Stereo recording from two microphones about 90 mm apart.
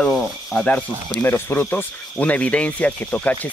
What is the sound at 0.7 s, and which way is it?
Speech, 20° left (ahead or behind).